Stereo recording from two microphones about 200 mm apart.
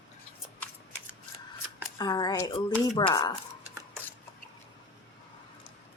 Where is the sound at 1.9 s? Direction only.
20° left (ahead or behind).